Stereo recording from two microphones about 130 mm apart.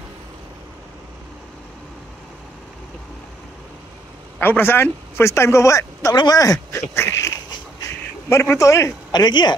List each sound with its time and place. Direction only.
4.4 s speech: 15° left (ahead or behind); by 9.6 s 35° left (ahead or behind)